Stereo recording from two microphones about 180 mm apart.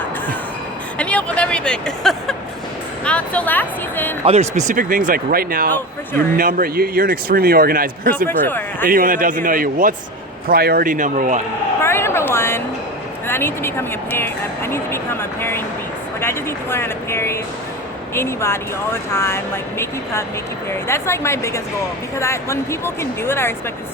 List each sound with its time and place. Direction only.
0.9 s a sound: 5° left (ahead or behind)
3.0 s speech: 5° left (ahead or behind)
4.3 s speech: 40° right (ahead or behind); by 8.1 s 55° right (ahead or behind)
8.3 s speech: 10° left (ahead or behind)
8.9 s speech: 50° right (ahead or behind)
11.8 s a sound: 15° left (ahead or behind)
13.2 s speech: 10° left (ahead or behind)
20.7 s speech: 15° left (ahead or behind)